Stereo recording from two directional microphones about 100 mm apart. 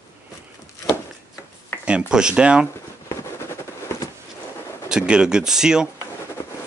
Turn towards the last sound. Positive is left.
turn(degrees=-5)  # may be behind; listen again after turning